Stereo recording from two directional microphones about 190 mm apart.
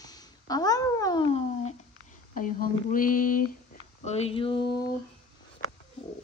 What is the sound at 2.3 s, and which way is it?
Speech, 45° left (ahead or behind).